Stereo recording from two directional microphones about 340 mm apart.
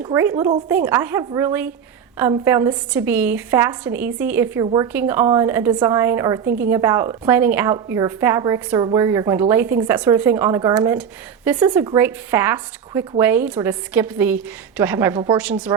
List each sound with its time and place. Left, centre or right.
0.0 s a woman's voice: centre
6.4 s a woman's voice: right
6.7 s a woman's voice: centre